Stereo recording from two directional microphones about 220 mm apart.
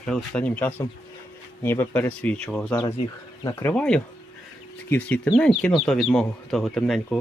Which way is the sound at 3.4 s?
15° left (ahead or behind).